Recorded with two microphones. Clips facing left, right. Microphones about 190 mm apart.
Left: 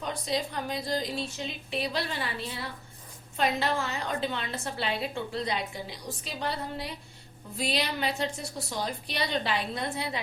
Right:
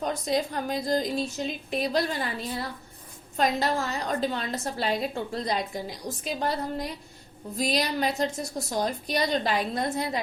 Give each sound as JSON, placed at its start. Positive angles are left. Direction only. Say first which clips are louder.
{"t": 0.0, "sound": "a woman's voice", "louder": "right 4 dB", "side_deg": -45}